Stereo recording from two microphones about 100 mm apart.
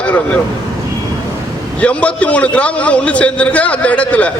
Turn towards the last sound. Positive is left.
turn(degrees=15)  # may be behind; listen again after turning